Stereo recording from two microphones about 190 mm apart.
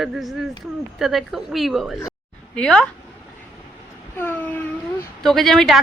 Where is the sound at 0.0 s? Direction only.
Centre (ahead or behind).